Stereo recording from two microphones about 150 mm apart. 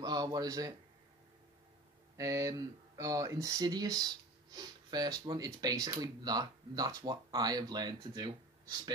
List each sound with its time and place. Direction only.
0.0 s a man's voice: 25° right (ahead or behind)
2.1 s speech: 20° right (ahead or behind)